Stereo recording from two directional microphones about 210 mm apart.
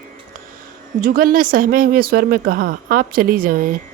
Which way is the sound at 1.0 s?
45° right (ahead or behind).